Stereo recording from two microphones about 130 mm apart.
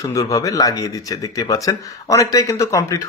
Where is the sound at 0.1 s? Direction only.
25° left (ahead or behind).